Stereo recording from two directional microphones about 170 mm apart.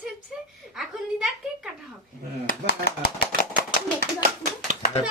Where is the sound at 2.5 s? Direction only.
65° left (ahead or behind).